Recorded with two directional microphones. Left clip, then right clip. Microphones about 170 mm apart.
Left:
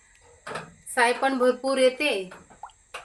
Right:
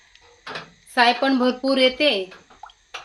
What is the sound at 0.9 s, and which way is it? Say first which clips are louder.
Speech: right 4 dB; 45° right (ahead or behind).